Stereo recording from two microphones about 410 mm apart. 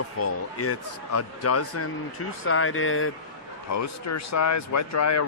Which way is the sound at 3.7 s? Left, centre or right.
Left.